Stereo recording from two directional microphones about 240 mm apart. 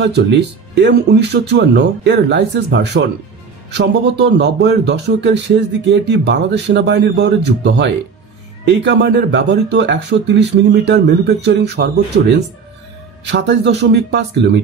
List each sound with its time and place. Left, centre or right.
0.0 s speech: right